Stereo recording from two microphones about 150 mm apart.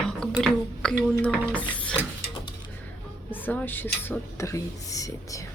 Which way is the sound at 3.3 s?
10° left (ahead or behind).